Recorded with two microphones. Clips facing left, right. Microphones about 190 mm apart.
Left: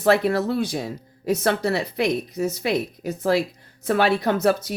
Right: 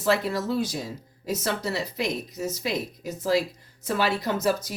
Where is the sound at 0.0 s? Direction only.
65° left (ahead or behind).